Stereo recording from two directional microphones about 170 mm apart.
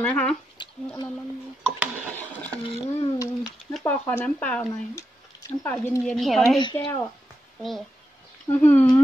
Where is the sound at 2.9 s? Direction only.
35° left (ahead or behind).